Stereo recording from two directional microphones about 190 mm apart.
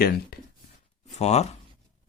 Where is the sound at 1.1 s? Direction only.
35° left (ahead or behind).